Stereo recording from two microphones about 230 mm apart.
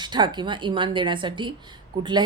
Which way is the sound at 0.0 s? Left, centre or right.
Centre.